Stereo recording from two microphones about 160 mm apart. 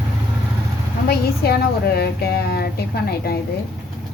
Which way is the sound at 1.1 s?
80° left.